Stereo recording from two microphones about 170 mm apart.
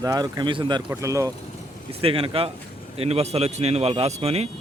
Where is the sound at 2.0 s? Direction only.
35° right (ahead or behind).